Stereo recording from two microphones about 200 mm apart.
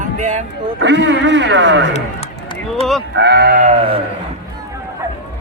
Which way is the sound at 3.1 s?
55° right (ahead or behind).